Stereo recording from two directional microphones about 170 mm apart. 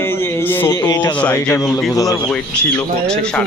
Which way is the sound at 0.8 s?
20° left (ahead or behind).